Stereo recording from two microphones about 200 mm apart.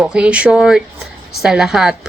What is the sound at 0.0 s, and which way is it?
A woman's voice, 5° right (ahead or behind).